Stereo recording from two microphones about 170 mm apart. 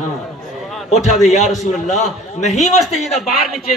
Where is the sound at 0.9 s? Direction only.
45° left (ahead or behind).